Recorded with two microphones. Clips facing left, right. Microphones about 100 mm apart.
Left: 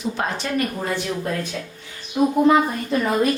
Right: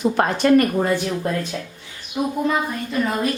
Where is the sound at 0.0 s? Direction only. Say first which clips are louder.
Right 7 dB; 50° right (ahead or behind).